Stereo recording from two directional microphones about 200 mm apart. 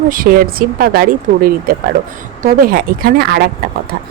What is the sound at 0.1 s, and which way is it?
Speech, 45° right (ahead or behind).